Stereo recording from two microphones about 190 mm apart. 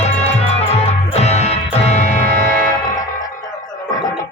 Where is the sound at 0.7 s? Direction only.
35° left (ahead or behind).